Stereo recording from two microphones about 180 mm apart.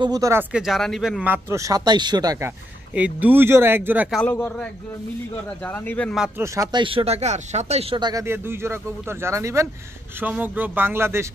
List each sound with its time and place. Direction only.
0.0 s speech: 20° right (ahead or behind); by 1.2 s centre (ahead or behind)
1.2 s speech: 15° right (ahead or behind)
2.9 s speech: 10° right (ahead or behind)
4.2 s speech: 10° left (ahead or behind)
6.2 s speech: 15° right (ahead or behind)